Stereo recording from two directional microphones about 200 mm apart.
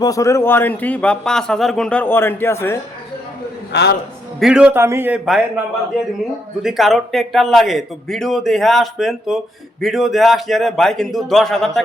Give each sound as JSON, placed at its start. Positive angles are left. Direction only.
{"t": 0.0, "sound": "a man's voice", "side_deg": 15}
{"t": 3.7, "sound": "a man's voice", "side_deg": 55}
{"t": 4.4, "sound": "a man's voice", "side_deg": -5}
{"t": 6.6, "sound": "a man's voice", "side_deg": 0}